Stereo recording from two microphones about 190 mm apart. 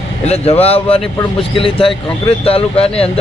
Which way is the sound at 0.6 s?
30° left (ahead or behind).